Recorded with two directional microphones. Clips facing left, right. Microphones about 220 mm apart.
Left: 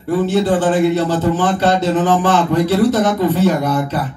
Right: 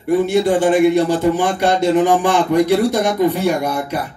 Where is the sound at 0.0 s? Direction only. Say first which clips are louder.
Right 1 dB; 15° right (ahead or behind).